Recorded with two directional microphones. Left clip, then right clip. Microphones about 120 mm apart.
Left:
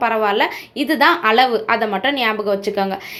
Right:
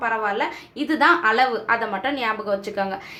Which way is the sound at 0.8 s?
25° left (ahead or behind).